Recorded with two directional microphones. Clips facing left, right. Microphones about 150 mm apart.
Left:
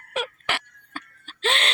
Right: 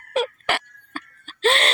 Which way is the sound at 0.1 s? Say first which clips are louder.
Right 6 dB; 40° right (ahead or behind).